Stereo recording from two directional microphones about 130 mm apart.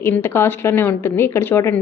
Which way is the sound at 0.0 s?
20° left (ahead or behind).